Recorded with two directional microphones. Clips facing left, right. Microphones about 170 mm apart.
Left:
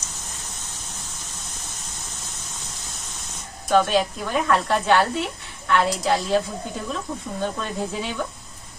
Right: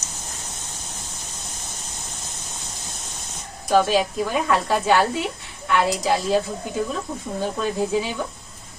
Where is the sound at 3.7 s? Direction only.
5° right (ahead or behind).